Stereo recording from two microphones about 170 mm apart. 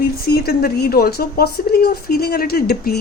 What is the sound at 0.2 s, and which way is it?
Speech, 65° left (ahead or behind).